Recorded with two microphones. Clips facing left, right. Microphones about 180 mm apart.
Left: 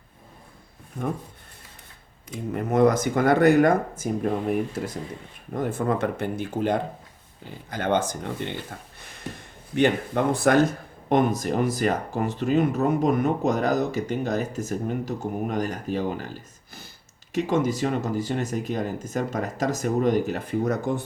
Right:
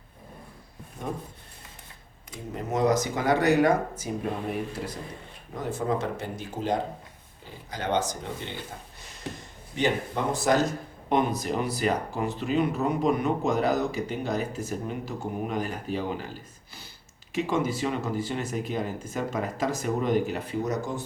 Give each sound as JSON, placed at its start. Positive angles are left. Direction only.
{"t": 2.5, "sound": "speech", "side_deg": 55}
{"t": 5.5, "sound": "speech", "side_deg": 55}
{"t": 9.7, "sound": "speech", "side_deg": 60}
{"t": 17.3, "sound": "speech", "side_deg": 45}